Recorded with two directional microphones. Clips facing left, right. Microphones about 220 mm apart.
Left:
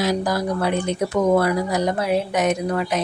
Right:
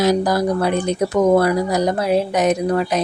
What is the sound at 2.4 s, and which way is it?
Speech, 35° right (ahead or behind).